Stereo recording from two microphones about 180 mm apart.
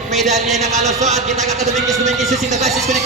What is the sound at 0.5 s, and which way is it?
A man's voice, 40° right (ahead or behind).